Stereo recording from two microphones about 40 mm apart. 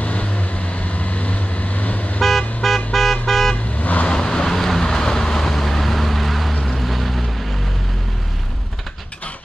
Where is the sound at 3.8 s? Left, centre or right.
Left.